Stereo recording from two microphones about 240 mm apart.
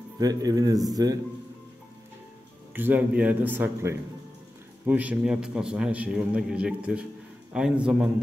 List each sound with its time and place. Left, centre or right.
0.2 s a man's voice: centre
2.7 s a man's voice: centre